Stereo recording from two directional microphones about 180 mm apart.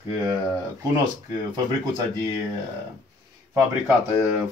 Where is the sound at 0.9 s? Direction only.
20° right (ahead or behind).